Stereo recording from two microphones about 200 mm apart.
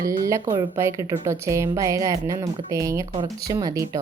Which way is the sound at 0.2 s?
15° right (ahead or behind).